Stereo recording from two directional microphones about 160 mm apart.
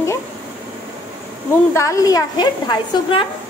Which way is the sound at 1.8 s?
20° left (ahead or behind).